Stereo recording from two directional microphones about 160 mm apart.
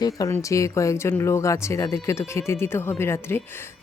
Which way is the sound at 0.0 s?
20° left (ahead or behind).